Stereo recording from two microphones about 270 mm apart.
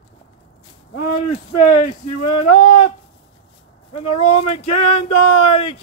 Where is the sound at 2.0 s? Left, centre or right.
Left.